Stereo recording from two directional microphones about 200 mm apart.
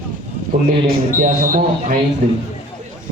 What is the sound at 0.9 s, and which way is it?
Speech, 45° right (ahead or behind).